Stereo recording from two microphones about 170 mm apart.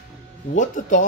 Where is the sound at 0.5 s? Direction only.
50° left (ahead or behind).